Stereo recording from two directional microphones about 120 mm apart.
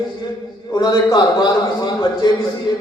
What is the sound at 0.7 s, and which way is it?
Speech, 35° left (ahead or behind).